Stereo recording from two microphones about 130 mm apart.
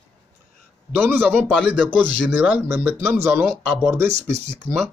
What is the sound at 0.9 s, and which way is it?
Speech, 15° right (ahead or behind).